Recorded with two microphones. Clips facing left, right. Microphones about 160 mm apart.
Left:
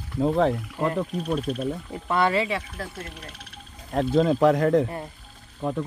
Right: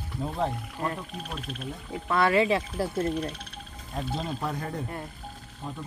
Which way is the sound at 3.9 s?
90° left.